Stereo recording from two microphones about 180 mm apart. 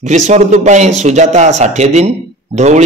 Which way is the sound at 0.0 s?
40° right (ahead or behind).